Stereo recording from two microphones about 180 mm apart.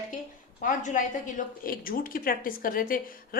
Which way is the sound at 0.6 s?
45° left (ahead or behind).